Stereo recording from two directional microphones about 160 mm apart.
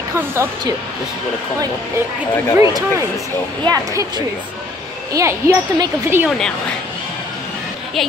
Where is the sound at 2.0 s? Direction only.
15° right (ahead or behind).